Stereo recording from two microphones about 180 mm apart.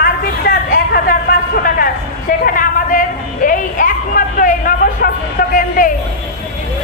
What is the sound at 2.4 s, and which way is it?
Speech, 50° left (ahead or behind).